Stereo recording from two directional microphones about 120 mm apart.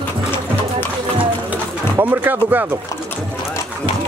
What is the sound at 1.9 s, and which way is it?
Speech, 20° right (ahead or behind).